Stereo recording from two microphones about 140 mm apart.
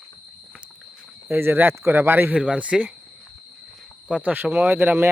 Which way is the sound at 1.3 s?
15° right (ahead or behind).